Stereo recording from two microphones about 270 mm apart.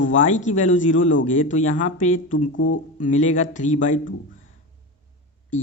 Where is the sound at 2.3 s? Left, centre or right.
Left.